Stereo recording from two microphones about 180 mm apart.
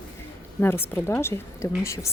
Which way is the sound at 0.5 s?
15° left (ahead or behind).